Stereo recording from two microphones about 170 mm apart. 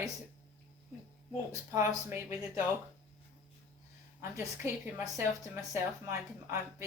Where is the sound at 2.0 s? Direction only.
15° right (ahead or behind).